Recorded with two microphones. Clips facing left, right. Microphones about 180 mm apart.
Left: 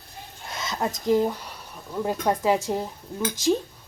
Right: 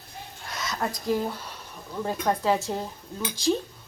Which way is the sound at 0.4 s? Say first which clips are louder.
Left 2 dB; 25° left (ahead or behind).